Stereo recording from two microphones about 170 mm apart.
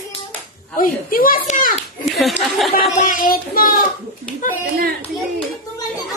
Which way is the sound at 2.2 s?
Centre (ahead or behind).